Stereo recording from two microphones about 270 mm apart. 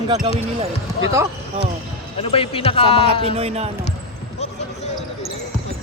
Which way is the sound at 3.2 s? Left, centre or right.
Right.